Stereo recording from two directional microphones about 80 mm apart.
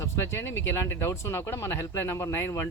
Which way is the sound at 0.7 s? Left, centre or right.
Left.